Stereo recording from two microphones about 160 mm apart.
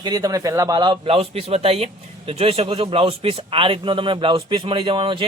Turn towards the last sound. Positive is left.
turn(degrees=-35)  # may be behind; listen again after turning